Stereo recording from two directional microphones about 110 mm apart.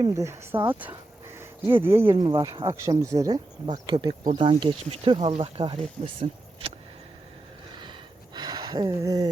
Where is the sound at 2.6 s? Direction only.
30° right (ahead or behind); by 6.7 s 60° right (ahead or behind).